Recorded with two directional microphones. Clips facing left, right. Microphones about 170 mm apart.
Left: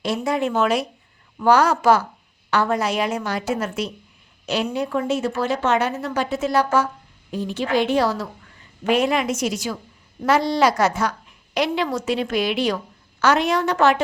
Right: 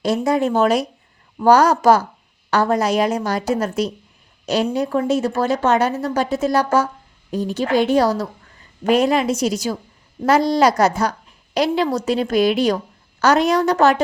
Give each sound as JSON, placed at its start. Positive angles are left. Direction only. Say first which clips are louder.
{"t": 0.0, "sound": "a woman's voice", "louder": "right 4 dB", "side_deg": -40}